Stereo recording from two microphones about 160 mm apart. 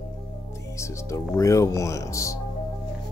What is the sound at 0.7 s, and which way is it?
Music, 20° left (ahead or behind).